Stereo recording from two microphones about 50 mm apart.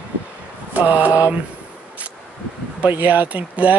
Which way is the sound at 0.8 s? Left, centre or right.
Right.